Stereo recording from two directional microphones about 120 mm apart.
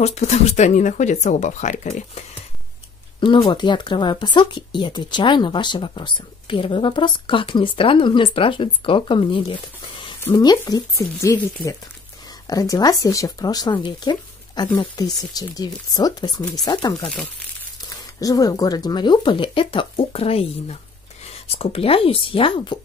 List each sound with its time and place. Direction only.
0.0 s speech: 65° left (ahead or behind); by 2.2 s 85° left
3.3 s speech: 40° left (ahead or behind)
10.3 s speech: 35° left (ahead or behind)